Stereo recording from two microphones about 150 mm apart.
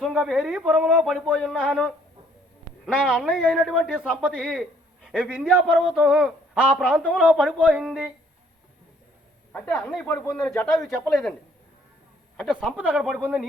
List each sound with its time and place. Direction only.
0.0 s a man's voice: centre (ahead or behind)
1.5 s speech: 5° right (ahead or behind)
2.8 s a man's voice: 5° right (ahead or behind)
9.5 s a man's voice: 10° left (ahead or behind)
12.4 s a man's voice: centre (ahead or behind)